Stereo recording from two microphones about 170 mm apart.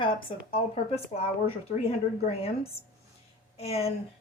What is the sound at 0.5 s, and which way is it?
Speech, 35° left (ahead or behind).